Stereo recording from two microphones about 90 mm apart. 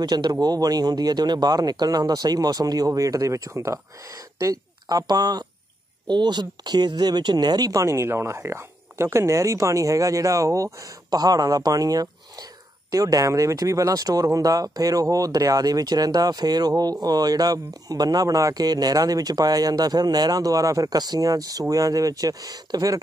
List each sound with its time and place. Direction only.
0.0 s speech: 50° right (ahead or behind)
7.8 s speech: 30° right (ahead or behind)